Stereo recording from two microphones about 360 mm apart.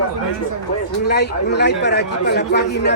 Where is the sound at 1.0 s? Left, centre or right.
Left.